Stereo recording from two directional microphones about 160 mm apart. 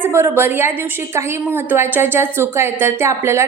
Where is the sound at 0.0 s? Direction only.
15° right (ahead or behind).